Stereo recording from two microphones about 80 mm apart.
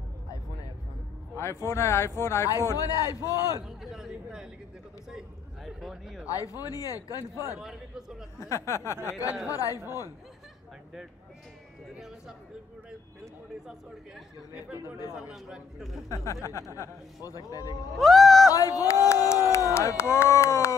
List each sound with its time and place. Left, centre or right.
1.3 s speech: left
3.6 s a sound: centre
5.1 s a man's voice: centre
6.2 s speech: left
7.5 s speech: centre
8.4 s speech: left
9.5 s speech: left
13.7 s speech: centre
14.7 s speech: right
15.1 s a man's voice: centre
16.1 s speech: left
17.9 s a man's voice: centre
18.5 s speech: left